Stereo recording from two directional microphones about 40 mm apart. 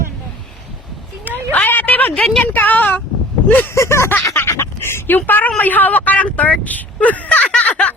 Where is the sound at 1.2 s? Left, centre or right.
Left.